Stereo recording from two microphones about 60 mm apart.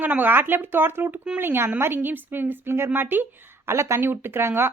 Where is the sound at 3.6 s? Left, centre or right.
Right.